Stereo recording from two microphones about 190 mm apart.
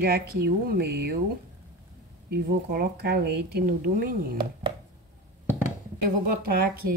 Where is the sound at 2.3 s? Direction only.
55° right (ahead or behind).